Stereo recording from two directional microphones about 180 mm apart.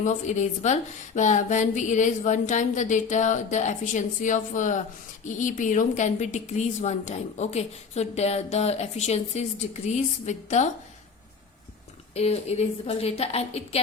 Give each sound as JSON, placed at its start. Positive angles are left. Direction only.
{"t": 0.0, "sound": "a woman's voice", "side_deg": 40}
{"t": 12.1, "sound": "a woman's voice", "side_deg": 35}